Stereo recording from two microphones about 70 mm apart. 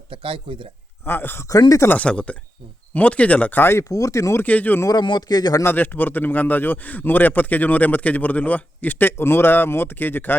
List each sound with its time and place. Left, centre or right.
1.0 s speech: left
1.5 s speech: left
1.9 s a man's voice: centre
3.6 s speech: left
3.8 s speech: left
4.4 s a man's voice: left
4.9 s a man's voice: left
5.6 s a man's voice: left